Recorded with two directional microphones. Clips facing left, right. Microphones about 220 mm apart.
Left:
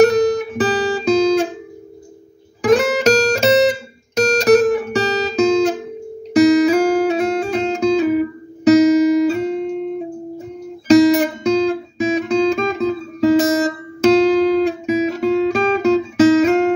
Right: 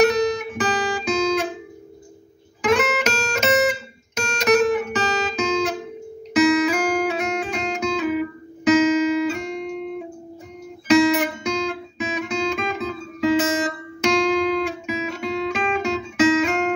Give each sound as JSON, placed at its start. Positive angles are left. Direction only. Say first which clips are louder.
{"t": 0.4, "sound": "guitar", "louder": "left 6 dB", "side_deg": 35}
{"t": 2.7, "sound": "music", "louder": "left 8 dB", "side_deg": 35}
{"t": 4.1, "sound": "guitar", "louder": "left 7 dB", "side_deg": 35}
{"t": 6.3, "sound": "music", "louder": "left 6 dB", "side_deg": 35}
{"t": 10.9, "sound": "guitar", "louder": "left 6 dB", "side_deg": 35}